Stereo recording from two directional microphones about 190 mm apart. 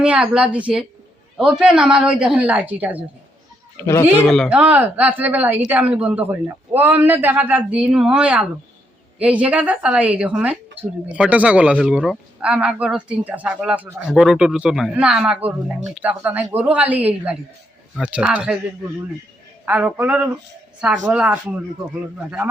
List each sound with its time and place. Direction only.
0.0 s a woman's voice: 5° right (ahead or behind)
4.2 s a woman's voice: 5° left (ahead or behind)
19.6 s a woman's voice: 5° right (ahead or behind)